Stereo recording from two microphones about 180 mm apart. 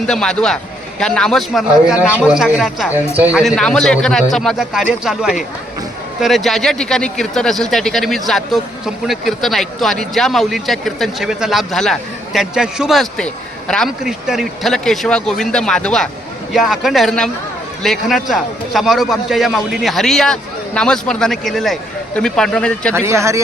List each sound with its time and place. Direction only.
0.1 s speech: 5° left (ahead or behind)
23.0 s speech: 15° right (ahead or behind)